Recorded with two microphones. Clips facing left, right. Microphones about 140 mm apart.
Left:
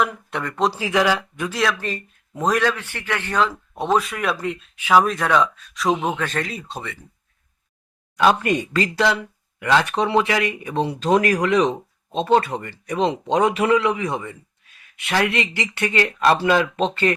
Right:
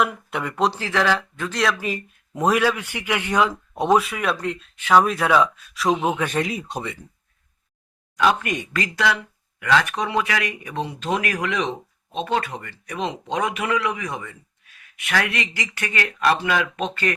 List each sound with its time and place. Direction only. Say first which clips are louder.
0.0 s speech: even; 5° right (ahead or behind)
0.7 s speech: left 2 dB; 10° left (ahead or behind)
1.8 s speech: right 1 dB; 10° right (ahead or behind)
4.0 s speech: even; centre (ahead or behind)
6.2 s speech: right 2 dB; 15° right (ahead or behind)
8.1 s speech: left 3 dB; 30° left (ahead or behind)